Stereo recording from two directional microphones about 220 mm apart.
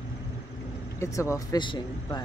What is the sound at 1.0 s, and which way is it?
Speech, 15° left (ahead or behind).